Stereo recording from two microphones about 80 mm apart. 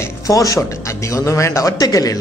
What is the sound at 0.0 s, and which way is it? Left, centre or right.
A man's voice, left.